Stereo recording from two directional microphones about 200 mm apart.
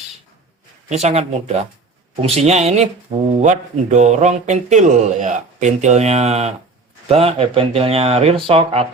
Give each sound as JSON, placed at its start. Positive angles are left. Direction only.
{"t": 0.9, "sound": "speech", "side_deg": -35}